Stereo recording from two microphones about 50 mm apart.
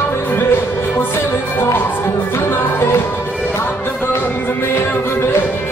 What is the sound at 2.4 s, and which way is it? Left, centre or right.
Music, left.